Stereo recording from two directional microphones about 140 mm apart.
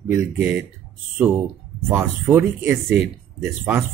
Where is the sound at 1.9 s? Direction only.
15° right (ahead or behind).